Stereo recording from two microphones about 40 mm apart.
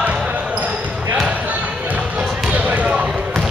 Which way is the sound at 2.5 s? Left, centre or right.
Right.